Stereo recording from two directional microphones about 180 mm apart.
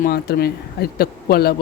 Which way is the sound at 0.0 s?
60° left (ahead or behind).